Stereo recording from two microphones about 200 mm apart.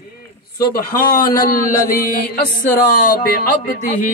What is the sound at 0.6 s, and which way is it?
Mantra, 50° left (ahead or behind).